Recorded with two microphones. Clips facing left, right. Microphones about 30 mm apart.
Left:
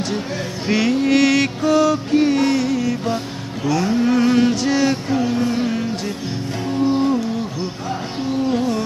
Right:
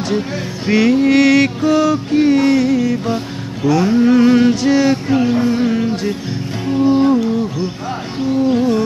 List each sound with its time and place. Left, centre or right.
0.7 s music: centre
5.1 s music: centre
8.5 s music: centre